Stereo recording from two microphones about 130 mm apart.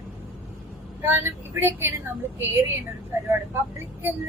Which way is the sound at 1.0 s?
15° right (ahead or behind).